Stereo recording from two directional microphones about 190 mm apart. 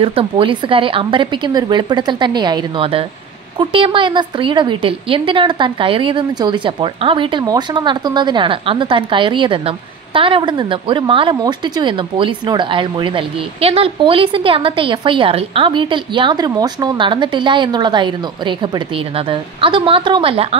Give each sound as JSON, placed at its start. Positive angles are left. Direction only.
{"t": 0.0, "sound": "a woman's voice", "side_deg": -30}